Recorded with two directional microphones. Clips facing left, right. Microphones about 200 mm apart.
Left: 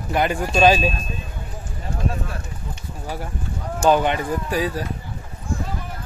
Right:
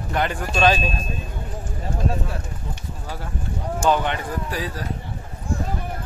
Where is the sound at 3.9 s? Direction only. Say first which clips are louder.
Left 4 dB; 15° left (ahead or behind).